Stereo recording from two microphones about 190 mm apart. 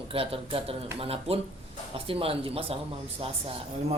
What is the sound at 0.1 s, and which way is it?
Speech, 30° right (ahead or behind).